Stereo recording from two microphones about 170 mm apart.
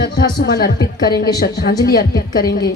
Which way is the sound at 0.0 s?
80° left.